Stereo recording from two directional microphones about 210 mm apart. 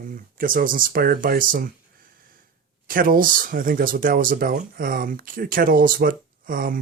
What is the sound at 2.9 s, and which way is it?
Speech, 40° right (ahead or behind).